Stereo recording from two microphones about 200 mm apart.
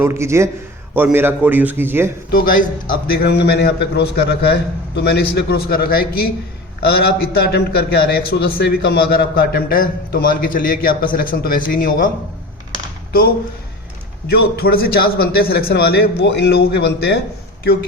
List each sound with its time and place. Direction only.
0.0 s a man's voice: 10° right (ahead or behind)
2.3 s a man's voice: 45° left (ahead or behind)
14.3 s a man's voice: 50° left (ahead or behind)